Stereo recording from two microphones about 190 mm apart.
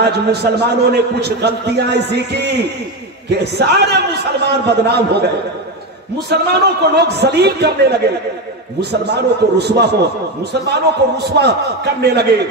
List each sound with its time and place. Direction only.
0.0 s a man's voice: 60° right (ahead or behind)
6.3 s a man's voice: 60° right (ahead or behind)
9.0 s a man's voice: 60° right (ahead or behind)